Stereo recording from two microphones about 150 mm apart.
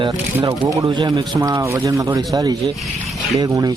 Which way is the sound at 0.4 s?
25° right (ahead or behind).